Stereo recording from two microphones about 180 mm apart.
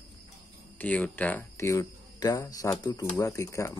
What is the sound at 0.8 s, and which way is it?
Speech, 10° left (ahead or behind).